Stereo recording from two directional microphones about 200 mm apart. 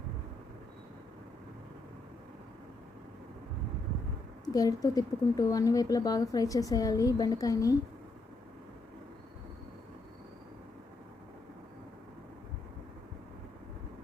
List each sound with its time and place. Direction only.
4.4 s speech: 20° left (ahead or behind)